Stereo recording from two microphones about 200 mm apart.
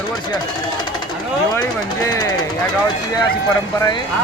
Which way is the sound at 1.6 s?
15° left (ahead or behind).